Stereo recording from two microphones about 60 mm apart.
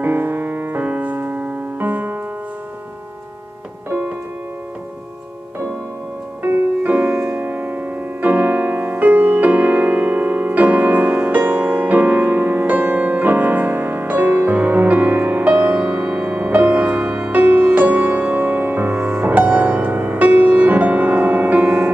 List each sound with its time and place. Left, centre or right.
0.0 s piano: right
6.8 s music: right